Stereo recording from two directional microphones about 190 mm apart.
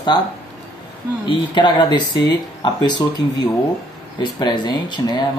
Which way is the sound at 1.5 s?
25° left (ahead or behind).